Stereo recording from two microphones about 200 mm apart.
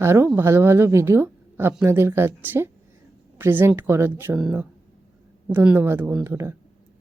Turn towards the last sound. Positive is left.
turn(degrees=-15)  # may be behind; listen again after turning